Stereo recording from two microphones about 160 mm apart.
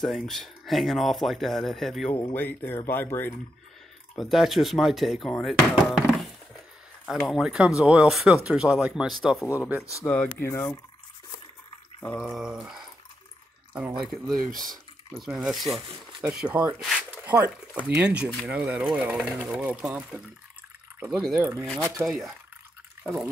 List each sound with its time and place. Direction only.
0.0 s speech: centre (ahead or behind)
2.3 s speech: 10° left (ahead or behind)
4.2 s speech: centre (ahead or behind)
7.2 s speech: 5° right (ahead or behind)
9.8 s speech: 15° left (ahead or behind)
12.2 s speech: centre (ahead or behind)
17.2 s a sound: 10° right (ahead or behind)
17.8 s speech: 5° right (ahead or behind)